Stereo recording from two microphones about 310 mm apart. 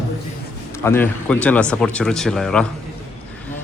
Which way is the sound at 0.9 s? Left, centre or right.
Centre.